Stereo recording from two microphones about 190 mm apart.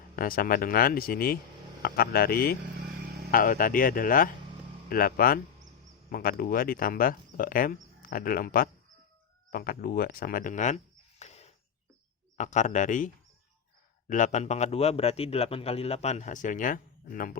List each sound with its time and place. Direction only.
0.2 s speech: 50° left (ahead or behind)
11.2 s a sound: 35° left (ahead or behind)
12.4 s a man's voice: 40° left (ahead or behind)
14.1 s a man's voice: 40° left (ahead or behind)